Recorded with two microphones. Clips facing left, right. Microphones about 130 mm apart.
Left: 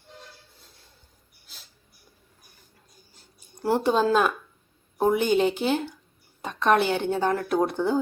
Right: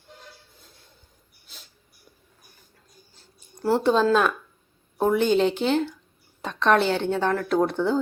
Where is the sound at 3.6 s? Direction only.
15° left (ahead or behind).